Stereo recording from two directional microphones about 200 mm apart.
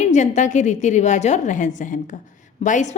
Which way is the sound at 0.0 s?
35° left (ahead or behind).